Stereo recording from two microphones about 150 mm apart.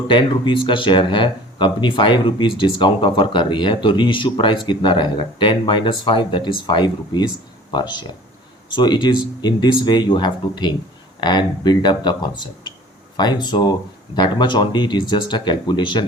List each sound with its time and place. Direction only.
0.1 s speech: 35° left (ahead or behind)